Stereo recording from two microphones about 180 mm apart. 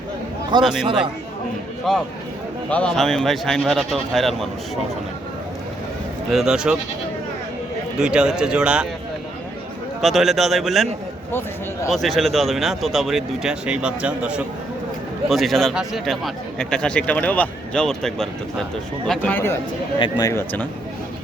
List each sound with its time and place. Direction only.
0.6 s a man's voice: centre (ahead or behind)
1.9 s a man's voice: centre (ahead or behind)
6.3 s a man's voice: 5° right (ahead or behind)
7.9 s a man's voice: 5° right (ahead or behind)
10.0 s a man's voice: centre (ahead or behind)
11.3 s speech: 15° left (ahead or behind)
11.9 s a man's voice: centre (ahead or behind)